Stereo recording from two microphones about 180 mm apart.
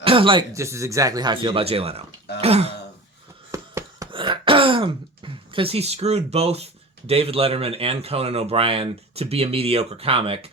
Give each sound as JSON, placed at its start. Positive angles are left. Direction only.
{"t": 0.0, "sound": "speech", "side_deg": -30}
{"t": 0.5, "sound": "speech", "side_deg": -15}
{"t": 3.5, "sound": "a sound", "side_deg": -15}
{"t": 4.1, "sound": "throat clearing", "side_deg": -30}
{"t": 7.1, "sound": "speech", "side_deg": -30}